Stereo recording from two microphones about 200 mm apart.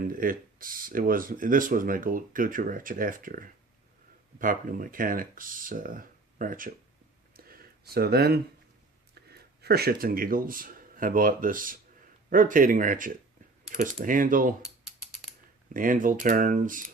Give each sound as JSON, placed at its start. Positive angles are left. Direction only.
{"t": 0.0, "sound": "speech", "side_deg": -45}
{"t": 7.3, "sound": "a sound", "side_deg": -45}
{"t": 9.1, "sound": "speech", "side_deg": -55}
{"t": 15.7, "sound": "speech", "side_deg": -45}